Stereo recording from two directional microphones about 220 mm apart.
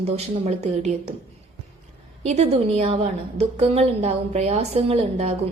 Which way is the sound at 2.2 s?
30° right (ahead or behind).